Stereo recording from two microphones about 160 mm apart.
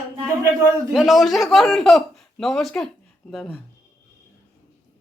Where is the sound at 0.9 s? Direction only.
Centre (ahead or behind).